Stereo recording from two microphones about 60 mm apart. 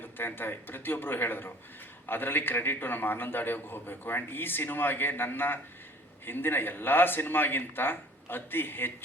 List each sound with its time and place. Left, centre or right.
0.0 s a man's voice: left